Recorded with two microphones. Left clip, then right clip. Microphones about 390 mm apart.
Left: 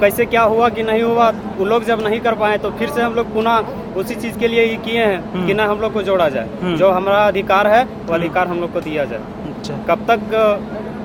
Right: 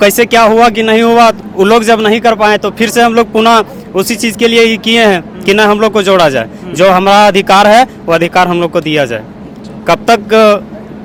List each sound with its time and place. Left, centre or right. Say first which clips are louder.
0.0 s speech: right 7 dB; right